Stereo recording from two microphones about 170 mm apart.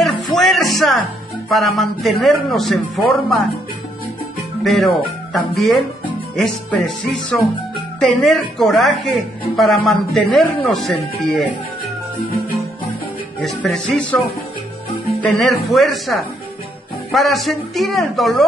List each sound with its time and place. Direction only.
0.0 s music: centre (ahead or behind)
1.5 s a man's voice: centre (ahead or behind)
4.6 s a man's voice: centre (ahead or behind)
13.4 s a man's voice: centre (ahead or behind)
15.2 s a man's voice: centre (ahead or behind)